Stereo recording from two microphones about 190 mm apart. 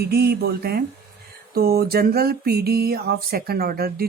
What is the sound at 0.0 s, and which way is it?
Speech, 55° right (ahead or behind).